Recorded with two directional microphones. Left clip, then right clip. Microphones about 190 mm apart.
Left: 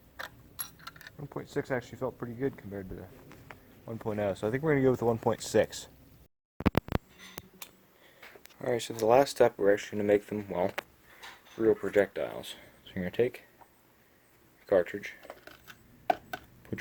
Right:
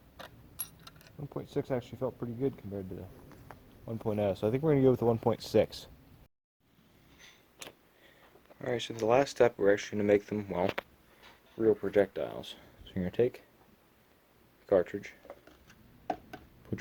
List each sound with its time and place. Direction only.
1.2 s speech: 25° right (ahead or behind)
2.0 s speech: 15° right (ahead or behind)
8.5 s speech: 10° left (ahead or behind); by 13.4 s 15° right (ahead or behind)
14.7 s speech: 10° right (ahead or behind)
15.6 s a sound: centre (ahead or behind)
16.7 s speech: 10° right (ahead or behind)